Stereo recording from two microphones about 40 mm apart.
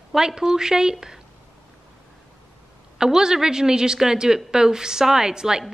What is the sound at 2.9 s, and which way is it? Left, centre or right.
A woman's voice, centre.